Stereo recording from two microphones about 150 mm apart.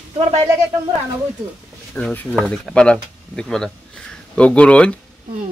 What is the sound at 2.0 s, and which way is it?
Speech, 5° left (ahead or behind).